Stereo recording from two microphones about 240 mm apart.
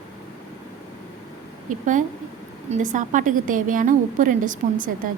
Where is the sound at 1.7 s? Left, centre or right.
Right.